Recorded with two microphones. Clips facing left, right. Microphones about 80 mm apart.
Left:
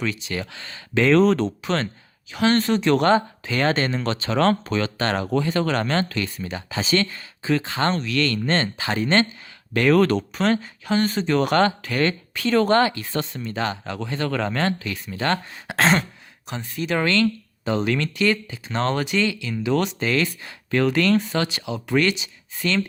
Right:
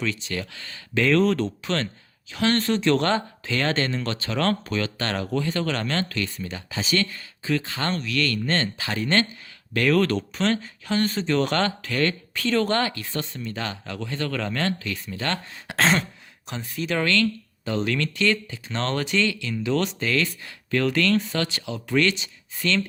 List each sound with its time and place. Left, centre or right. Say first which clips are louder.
0.0 s speech: left 1 dB; centre
6.7 s speech: left 3 dB; left
15.5 s speech: even; centre
17.0 s speech: left 2 dB; left
20.0 s speech: left 2 dB; left